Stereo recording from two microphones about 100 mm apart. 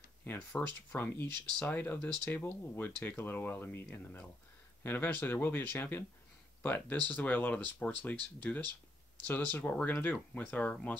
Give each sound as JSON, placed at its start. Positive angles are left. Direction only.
{"t": 0.2, "sound": "speech", "side_deg": 20}